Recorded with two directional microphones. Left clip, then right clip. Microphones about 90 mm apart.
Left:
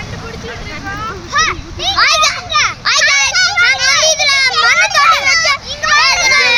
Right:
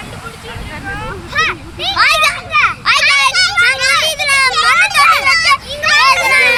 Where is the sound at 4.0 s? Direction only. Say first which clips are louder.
Left 1 dB; 40° left (ahead or behind).